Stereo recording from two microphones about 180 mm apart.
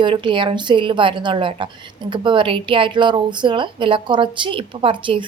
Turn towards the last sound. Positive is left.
turn(degrees=-25)  # may be behind; listen again after turning